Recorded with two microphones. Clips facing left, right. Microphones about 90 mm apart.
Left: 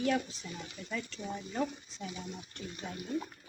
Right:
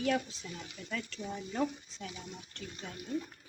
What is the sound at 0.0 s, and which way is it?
Speech, centre (ahead or behind).